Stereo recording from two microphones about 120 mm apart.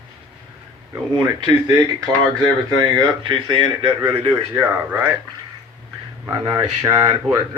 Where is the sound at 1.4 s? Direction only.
40° right (ahead or behind).